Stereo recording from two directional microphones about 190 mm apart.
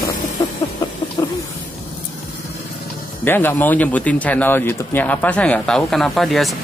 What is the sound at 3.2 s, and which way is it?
Speech, 10° left (ahead or behind).